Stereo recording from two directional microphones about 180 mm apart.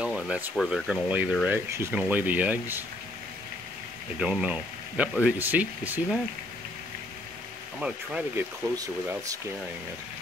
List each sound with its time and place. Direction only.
0.0 s a sound: 5° right (ahead or behind)
0.6 s speech: centre (ahead or behind)
1.5 s speech: 15° right (ahead or behind)
4.2 s speech: 5° right (ahead or behind)
7.8 s speech: 5° right (ahead or behind)
8.7 s speech: 20° right (ahead or behind)